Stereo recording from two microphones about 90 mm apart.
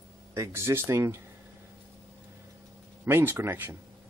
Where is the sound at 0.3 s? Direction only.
30° right (ahead or behind).